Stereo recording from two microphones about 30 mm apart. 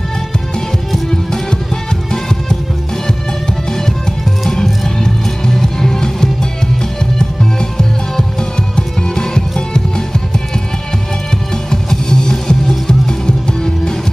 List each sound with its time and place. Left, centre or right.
5.5 s music: centre
7.7 s music: left
11.7 s music: left